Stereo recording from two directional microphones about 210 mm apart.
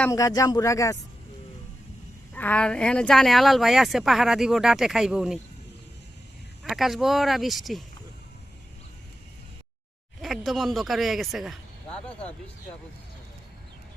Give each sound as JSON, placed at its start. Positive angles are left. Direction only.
{"t": 0.0, "sound": "speech", "side_deg": 15}
{"t": 2.3, "sound": "speech", "side_deg": 5}
{"t": 6.7, "sound": "speech", "side_deg": 0}
{"t": 10.2, "sound": "speech", "side_deg": 0}